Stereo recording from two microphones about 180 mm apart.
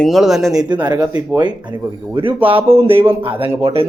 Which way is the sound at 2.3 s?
10° right (ahead or behind).